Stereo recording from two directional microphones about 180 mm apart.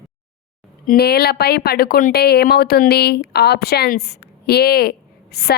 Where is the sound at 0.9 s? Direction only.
60° left (ahead or behind).